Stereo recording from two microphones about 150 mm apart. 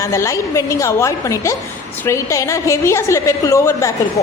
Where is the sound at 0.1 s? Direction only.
20° left (ahead or behind).